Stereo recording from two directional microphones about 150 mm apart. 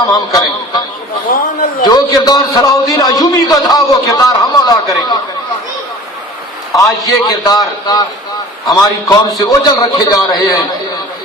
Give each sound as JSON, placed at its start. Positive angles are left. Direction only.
{"t": 0.1, "sound": "a man's voice", "side_deg": 25}
{"t": 1.3, "sound": "a sound", "side_deg": 65}
{"t": 1.8, "sound": "a man's voice", "side_deg": 25}
{"t": 7.3, "sound": "a man's voice", "side_deg": 25}